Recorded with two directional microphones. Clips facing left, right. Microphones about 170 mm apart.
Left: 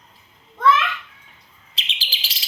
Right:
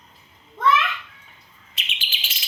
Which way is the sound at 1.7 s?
35° left (ahead or behind).